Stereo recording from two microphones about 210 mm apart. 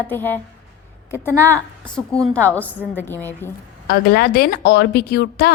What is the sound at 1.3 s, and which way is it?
Speech, 10° right (ahead or behind).